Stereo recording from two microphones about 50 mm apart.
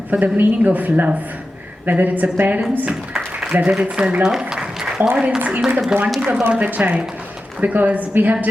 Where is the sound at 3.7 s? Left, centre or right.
Right.